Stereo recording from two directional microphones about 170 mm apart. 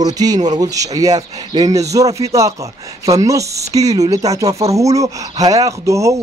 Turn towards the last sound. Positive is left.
turn(degrees=-20)  # may be behind; listen again after turning